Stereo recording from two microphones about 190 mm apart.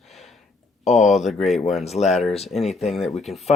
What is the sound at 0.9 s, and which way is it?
Speech, centre (ahead or behind).